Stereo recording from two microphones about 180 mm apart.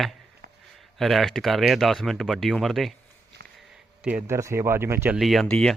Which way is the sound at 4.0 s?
10° right (ahead or behind).